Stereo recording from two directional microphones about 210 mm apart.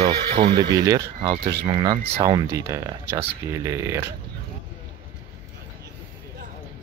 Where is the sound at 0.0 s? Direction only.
20° right (ahead or behind).